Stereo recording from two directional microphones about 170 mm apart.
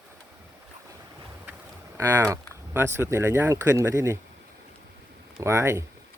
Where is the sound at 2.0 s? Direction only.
15° right (ahead or behind).